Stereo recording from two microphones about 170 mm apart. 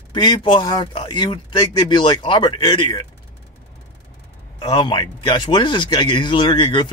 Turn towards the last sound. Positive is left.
turn(degrees=30)  # may be behind; listen again after turning